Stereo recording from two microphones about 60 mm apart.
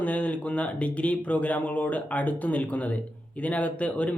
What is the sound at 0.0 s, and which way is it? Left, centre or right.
Speech, left.